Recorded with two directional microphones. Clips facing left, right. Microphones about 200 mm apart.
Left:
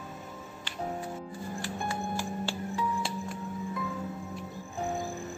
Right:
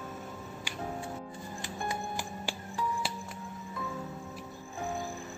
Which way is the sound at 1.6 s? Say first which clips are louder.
Left 2 dB; 15° right (ahead or behind).